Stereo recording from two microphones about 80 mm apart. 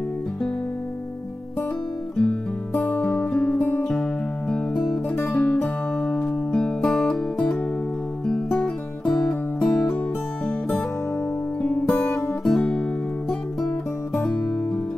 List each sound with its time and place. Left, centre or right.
2.1 s music: centre